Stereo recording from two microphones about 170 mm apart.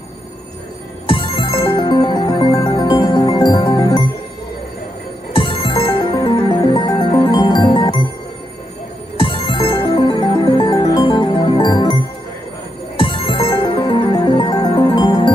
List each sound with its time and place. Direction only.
1.0 s music: 30° left (ahead or behind)
5.3 s music: 30° left (ahead or behind)
9.2 s music: 30° left (ahead or behind)